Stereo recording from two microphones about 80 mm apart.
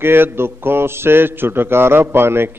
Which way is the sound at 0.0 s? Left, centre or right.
Right.